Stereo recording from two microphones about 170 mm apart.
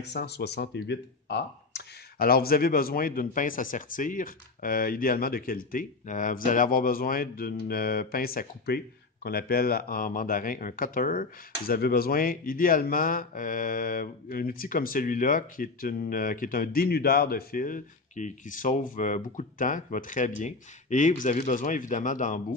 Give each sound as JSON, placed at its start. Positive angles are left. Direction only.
{"t": 0.0, "sound": "speech", "side_deg": 75}